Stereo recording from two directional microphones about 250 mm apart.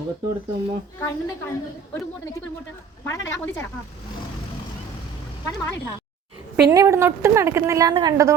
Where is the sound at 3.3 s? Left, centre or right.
Centre.